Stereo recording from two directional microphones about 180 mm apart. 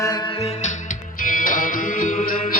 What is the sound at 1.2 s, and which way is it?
Music, 50° left (ahead or behind).